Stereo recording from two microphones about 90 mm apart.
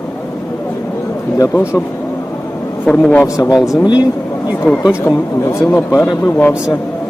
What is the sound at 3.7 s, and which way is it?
Speech, 45° left (ahead or behind).